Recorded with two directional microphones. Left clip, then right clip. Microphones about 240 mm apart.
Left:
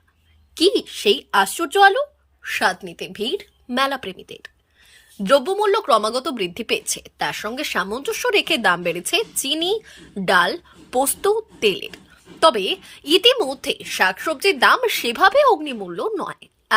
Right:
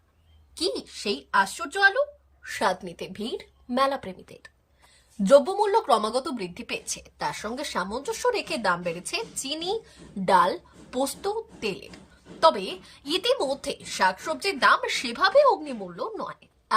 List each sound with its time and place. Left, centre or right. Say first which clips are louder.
0.5 s a woman's voice: left 11 dB; centre
2.6 s speech: left 5 dB; centre
6.5 s a woman's voice: left 10 dB; centre
10.5 s a woman's voice: left 9 dB; centre